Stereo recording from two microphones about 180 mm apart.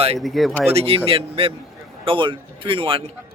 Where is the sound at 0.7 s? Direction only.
35° right (ahead or behind).